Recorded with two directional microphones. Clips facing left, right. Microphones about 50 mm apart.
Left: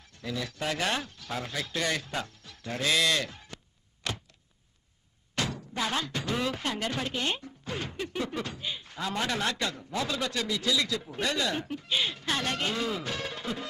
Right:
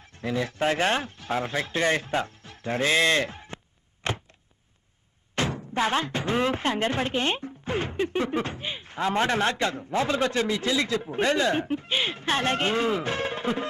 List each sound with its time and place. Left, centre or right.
0.0 s speech: right
4.0 s a sound: right
5.3 s speech: right